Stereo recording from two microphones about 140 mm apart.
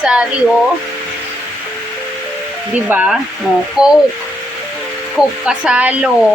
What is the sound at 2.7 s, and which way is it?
Speech, 10° right (ahead or behind).